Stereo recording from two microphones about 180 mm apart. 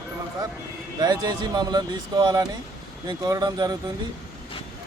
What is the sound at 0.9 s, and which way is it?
Speech, 25° right (ahead or behind).